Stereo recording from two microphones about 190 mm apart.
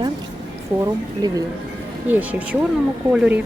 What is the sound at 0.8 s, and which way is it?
Speech, 20° right (ahead or behind).